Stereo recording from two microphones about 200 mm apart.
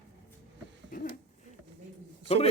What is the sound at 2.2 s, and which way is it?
Speech, 30° left (ahead or behind).